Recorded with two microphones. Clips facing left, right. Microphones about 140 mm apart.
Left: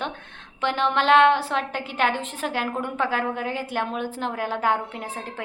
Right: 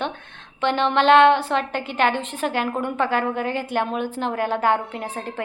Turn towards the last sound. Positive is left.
turn(degrees=0)  # may be behind; listen again after turning